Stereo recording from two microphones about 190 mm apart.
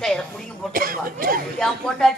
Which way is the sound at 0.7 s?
50° right (ahead or behind).